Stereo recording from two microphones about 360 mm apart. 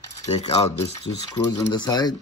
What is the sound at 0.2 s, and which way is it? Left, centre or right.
Speech, centre.